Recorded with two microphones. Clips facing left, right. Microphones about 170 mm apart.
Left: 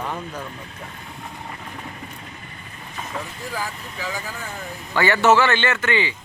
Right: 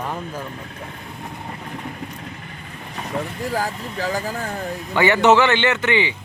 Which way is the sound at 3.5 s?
40° right (ahead or behind).